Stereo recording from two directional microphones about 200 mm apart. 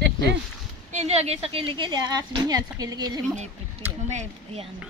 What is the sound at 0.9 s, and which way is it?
A woman's voice, 35° right (ahead or behind).